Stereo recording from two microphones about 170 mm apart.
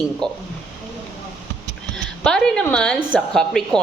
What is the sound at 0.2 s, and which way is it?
Speech, 25° right (ahead or behind).